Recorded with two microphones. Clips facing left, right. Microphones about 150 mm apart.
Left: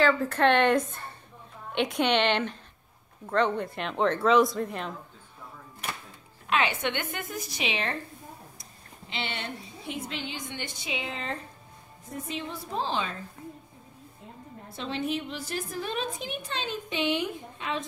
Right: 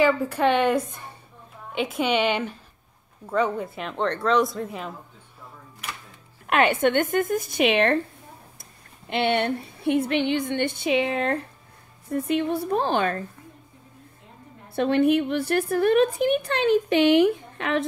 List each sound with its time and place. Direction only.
0.0 s a woman's voice: 10° right (ahead or behind)
6.4 s a woman's voice: 55° right (ahead or behind)
14.8 s a woman's voice: 60° right (ahead or behind)